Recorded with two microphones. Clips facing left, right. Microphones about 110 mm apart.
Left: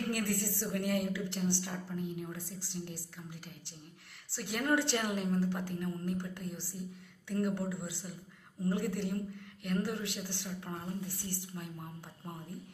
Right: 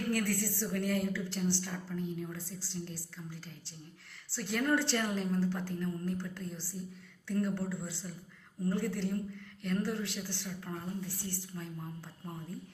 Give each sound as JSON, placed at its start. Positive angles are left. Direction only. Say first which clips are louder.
{"t": 0.1, "sound": "a woman's voice", "louder": "right 2 dB", "side_deg": 20}
{"t": 4.5, "sound": "a woman's voice", "louder": "right 1 dB", "side_deg": 15}